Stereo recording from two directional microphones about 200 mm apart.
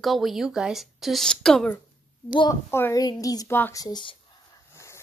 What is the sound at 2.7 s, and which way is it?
A woman's voice, 10° left (ahead or behind).